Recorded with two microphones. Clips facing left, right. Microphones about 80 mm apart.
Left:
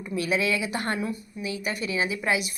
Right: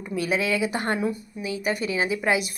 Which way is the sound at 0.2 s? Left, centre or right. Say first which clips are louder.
Right 2 dB; right.